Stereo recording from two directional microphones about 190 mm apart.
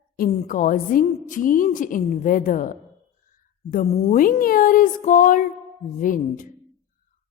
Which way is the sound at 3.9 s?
45° left (ahead or behind).